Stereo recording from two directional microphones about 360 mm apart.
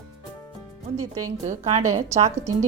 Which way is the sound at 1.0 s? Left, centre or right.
Right.